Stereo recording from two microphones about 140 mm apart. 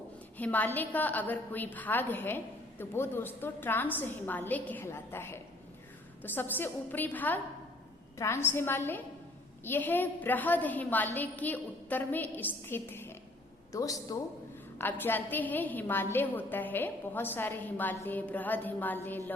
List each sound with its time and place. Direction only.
0.3 s a woman's voice: 10° left (ahead or behind)